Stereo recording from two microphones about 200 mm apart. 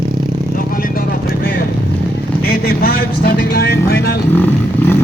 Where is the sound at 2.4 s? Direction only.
50° left (ahead or behind).